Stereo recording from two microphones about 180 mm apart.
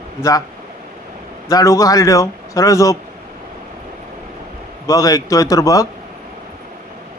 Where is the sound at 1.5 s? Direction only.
20° left (ahead or behind).